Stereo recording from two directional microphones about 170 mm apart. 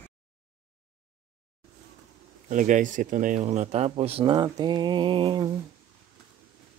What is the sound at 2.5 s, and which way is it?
Speech, 50° right (ahead or behind).